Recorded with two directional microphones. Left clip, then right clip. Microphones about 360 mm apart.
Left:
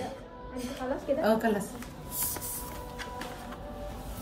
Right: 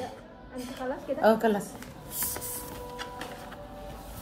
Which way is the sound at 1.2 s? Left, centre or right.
Centre.